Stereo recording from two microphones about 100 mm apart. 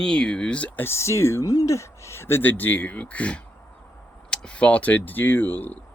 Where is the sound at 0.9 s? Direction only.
30° left (ahead or behind).